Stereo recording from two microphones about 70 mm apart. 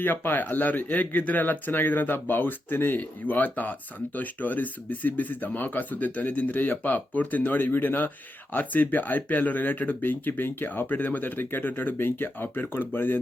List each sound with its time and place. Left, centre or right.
0.0 s speech: left